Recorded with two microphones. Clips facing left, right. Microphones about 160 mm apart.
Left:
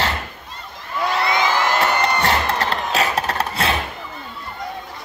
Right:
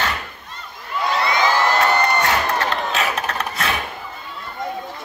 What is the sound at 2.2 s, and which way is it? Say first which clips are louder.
Crowd: even; 35° left (ahead or behind).